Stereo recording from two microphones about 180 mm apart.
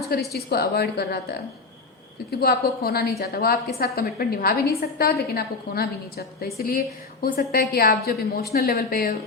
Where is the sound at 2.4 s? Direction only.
60° left (ahead or behind).